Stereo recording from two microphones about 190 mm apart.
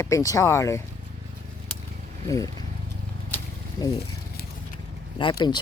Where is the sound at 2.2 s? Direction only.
20° left (ahead or behind).